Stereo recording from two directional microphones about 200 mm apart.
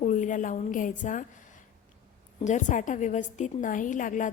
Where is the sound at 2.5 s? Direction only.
40° left (ahead or behind).